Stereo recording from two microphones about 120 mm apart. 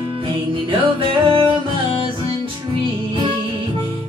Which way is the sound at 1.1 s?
45° right (ahead or behind).